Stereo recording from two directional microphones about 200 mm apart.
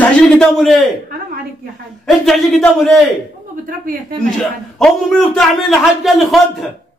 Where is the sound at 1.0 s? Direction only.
45° right (ahead or behind).